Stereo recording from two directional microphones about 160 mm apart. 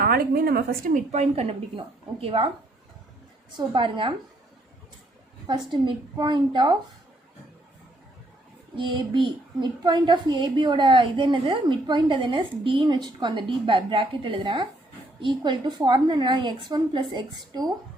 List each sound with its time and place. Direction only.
0.0 s a woman's voice: 70° right (ahead or behind)
1.1 s a woman's voice: 40° right (ahead or behind)
3.8 s a woman's voice: 30° right (ahead or behind)
5.5 s a woman's voice: 30° right (ahead or behind)
8.7 s a woman's voice: 30° right (ahead or behind)